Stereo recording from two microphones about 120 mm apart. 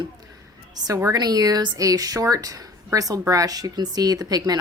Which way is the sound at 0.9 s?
25° right (ahead or behind).